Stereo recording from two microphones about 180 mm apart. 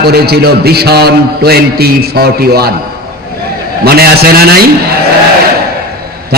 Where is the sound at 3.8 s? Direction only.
60° right (ahead or behind).